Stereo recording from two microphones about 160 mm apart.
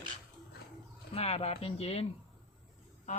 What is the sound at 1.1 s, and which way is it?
Speech, 35° left (ahead or behind).